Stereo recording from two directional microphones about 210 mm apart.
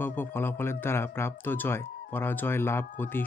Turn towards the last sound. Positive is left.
turn(degrees=10)  # may be behind; listen again after turning